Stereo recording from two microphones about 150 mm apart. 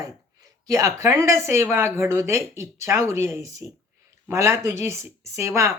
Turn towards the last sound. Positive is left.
turn(degrees=-20)  # may be behind; listen again after turning